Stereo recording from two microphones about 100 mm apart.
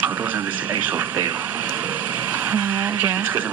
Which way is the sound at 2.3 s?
15° right (ahead or behind).